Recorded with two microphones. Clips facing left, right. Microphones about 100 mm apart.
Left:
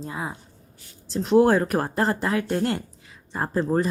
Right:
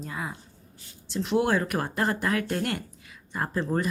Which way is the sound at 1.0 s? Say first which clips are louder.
Left 7 dB; 40° left (ahead or behind).